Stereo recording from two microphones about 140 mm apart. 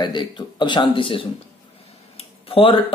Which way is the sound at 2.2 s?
40° left (ahead or behind).